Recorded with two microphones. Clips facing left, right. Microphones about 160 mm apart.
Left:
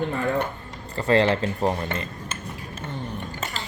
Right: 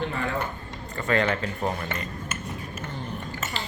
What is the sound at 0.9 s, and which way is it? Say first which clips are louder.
Speech: left 5 dB; 30° left (ahead or behind).